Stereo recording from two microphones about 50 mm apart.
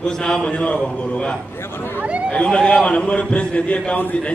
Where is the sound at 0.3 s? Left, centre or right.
Centre.